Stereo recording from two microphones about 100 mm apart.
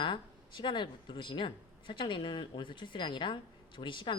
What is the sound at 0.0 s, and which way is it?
Speech, 50° left (ahead or behind).